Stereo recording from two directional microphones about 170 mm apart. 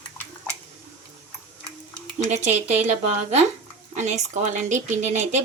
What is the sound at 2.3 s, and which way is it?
A woman's voice, 40° right (ahead or behind).